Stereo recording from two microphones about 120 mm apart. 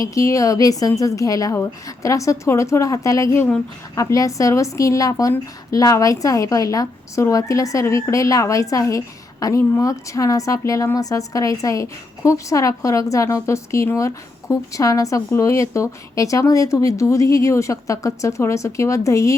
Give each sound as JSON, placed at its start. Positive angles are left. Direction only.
{"t": 0.0, "sound": "a woman's voice", "side_deg": 25}